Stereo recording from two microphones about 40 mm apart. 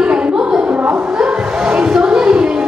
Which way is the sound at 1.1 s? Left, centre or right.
Right.